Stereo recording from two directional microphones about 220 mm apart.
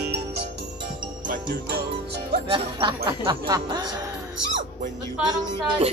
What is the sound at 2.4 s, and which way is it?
Speech, 25° right (ahead or behind).